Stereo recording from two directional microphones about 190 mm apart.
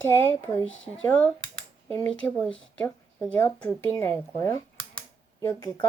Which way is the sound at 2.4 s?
5° left (ahead or behind).